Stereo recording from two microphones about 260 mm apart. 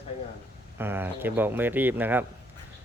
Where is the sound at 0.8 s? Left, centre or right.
Centre.